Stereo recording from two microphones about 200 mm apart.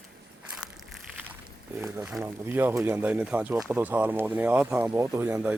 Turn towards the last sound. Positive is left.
turn(degrees=-10)  # may be behind; listen again after turning